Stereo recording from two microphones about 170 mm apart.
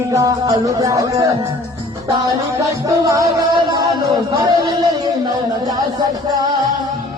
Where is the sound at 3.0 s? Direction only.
20° right (ahead or behind).